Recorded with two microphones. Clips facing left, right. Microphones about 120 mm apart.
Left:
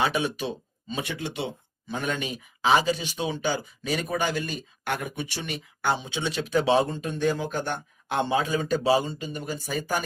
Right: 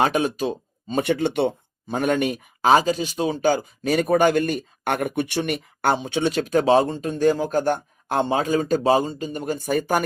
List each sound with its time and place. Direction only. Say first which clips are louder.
0.0 s speech: right 5 dB; 45° right (ahead or behind)
1.0 s speech: right 14 dB; 65° right (ahead or behind)